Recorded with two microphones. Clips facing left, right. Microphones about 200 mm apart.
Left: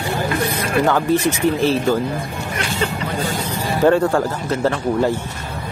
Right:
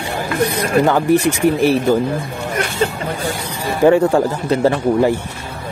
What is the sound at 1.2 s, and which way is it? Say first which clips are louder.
Speech: right 3 dB; 15° right (ahead or behind).